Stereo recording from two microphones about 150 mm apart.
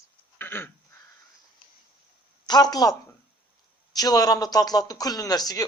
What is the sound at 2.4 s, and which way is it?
Speech, 25° left (ahead or behind).